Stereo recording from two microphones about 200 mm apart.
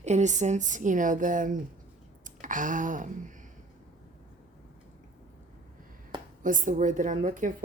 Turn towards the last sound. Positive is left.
turn(degrees=-40)  # may be behind; listen again after turning